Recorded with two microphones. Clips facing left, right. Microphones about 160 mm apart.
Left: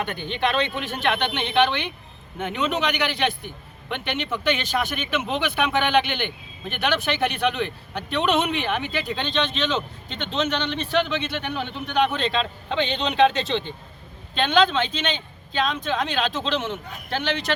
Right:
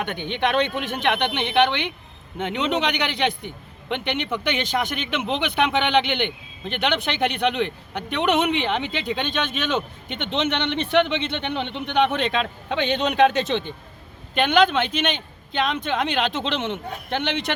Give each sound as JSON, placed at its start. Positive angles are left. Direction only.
{"t": 0.2, "sound": "a man's voice", "side_deg": -15}